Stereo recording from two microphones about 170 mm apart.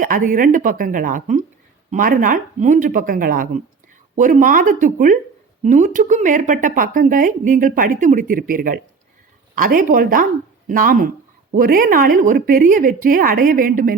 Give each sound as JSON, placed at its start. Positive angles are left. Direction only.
{"t": 0.0, "sound": "speech", "side_deg": -55}